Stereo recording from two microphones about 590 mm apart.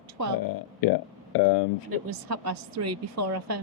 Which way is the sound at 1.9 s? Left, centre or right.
Right.